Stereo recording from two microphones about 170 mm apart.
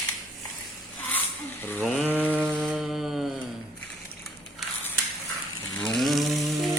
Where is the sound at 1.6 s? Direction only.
10° left (ahead or behind).